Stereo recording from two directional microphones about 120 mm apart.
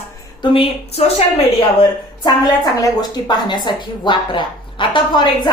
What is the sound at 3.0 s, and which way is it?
Speech, 35° left (ahead or behind).